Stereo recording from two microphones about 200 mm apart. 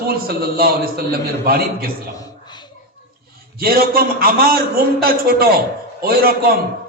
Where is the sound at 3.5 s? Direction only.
50° right (ahead or behind).